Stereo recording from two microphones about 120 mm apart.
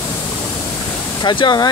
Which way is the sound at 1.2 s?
40° left (ahead or behind).